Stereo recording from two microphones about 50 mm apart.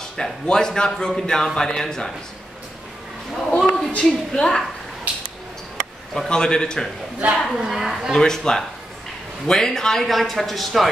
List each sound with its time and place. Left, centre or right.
0.2 s a man's voice: centre
3.5 s a sound: centre
4.0 s a man's voice: centre
5.1 s a sound: right
6.1 s a man's voice: centre
7.4 s a man's voice: centre
7.9 s a man's voice: centre